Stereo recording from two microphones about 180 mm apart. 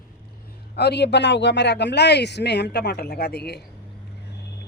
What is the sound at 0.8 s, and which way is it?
Speech, 70° left (ahead or behind).